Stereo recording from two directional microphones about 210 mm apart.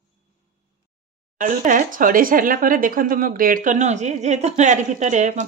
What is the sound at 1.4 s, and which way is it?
Speech, 40° right (ahead or behind).